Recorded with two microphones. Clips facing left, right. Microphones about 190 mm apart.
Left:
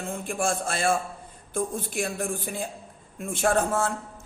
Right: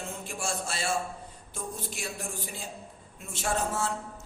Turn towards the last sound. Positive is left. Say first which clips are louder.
# left 6 dB
turn(degrees=55)  # may be behind; listen again after turning